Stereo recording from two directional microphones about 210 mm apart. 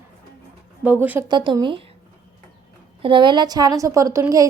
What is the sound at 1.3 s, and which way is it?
Speech, 20° right (ahead or behind).